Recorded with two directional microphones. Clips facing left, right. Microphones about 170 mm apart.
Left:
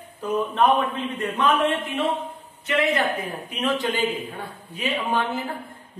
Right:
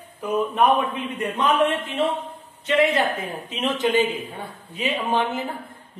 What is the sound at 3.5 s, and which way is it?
Speech, 20° right (ahead or behind).